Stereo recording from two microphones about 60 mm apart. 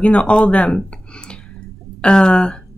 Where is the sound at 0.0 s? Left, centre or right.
Centre.